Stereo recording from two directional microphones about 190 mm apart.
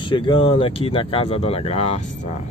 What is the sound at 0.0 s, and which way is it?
Speech, 25° left (ahead or behind).